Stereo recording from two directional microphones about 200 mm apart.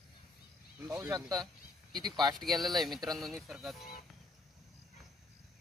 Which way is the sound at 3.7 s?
45° left (ahead or behind).